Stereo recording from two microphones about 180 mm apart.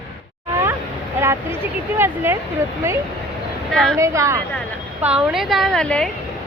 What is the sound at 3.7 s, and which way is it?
Speech, 5° left (ahead or behind).